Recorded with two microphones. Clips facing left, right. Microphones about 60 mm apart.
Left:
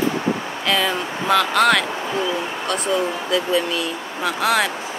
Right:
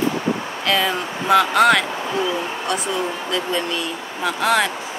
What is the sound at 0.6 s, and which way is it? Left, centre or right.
Speech, centre.